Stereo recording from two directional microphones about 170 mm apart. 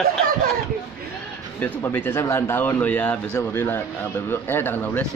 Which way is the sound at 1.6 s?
10° left (ahead or behind).